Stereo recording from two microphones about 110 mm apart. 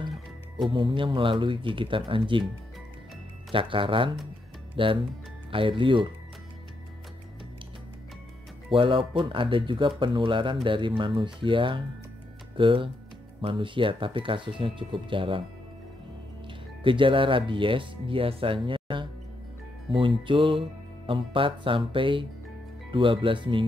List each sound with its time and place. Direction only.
0.7 s speech: 50° right (ahead or behind)
3.5 s speech: 50° right (ahead or behind)
8.7 s speech: 50° right (ahead or behind)
16.8 s speech: 50° right (ahead or behind)